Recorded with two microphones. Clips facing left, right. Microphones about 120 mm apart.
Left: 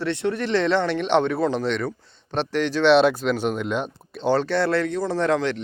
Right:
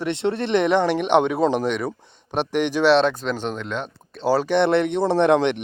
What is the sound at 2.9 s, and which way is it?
Speech, 5° left (ahead or behind).